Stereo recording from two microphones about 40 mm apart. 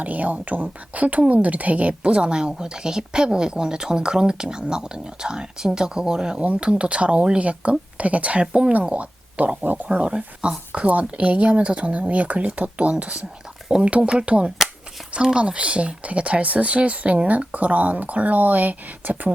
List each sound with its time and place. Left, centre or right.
0.0 s a woman's voice: right; by 6.4 s centre
6.4 s a woman's voice: right
9.6 s speech: right
10.0 s a woman's voice: right